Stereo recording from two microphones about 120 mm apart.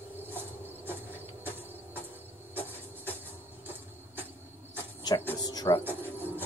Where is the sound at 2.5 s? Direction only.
15° left (ahead or behind).